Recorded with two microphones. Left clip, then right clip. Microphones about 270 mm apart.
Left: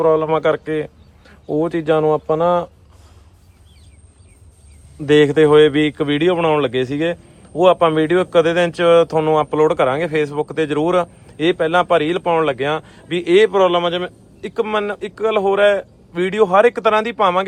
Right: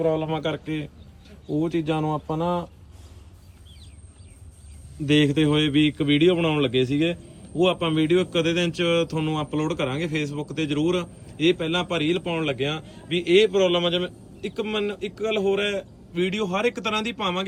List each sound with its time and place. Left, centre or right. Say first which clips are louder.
0.0 s a man's voice: left 10 dB; centre
2.2 s speech: left 10 dB; left
5.2 s a man's voice: left 11 dB; centre